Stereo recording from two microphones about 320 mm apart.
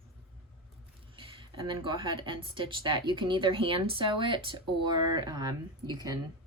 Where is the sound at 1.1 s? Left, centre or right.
Centre.